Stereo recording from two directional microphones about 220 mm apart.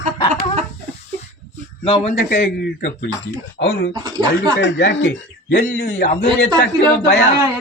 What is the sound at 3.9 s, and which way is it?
Speech, 20° right (ahead or behind).